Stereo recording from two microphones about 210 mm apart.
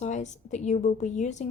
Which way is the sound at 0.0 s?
35° left (ahead or behind).